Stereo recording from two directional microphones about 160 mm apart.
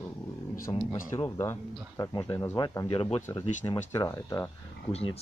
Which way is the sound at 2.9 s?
35° left (ahead or behind).